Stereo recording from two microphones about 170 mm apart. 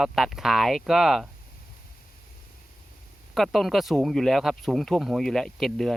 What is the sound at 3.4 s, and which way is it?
Speech, centre (ahead or behind).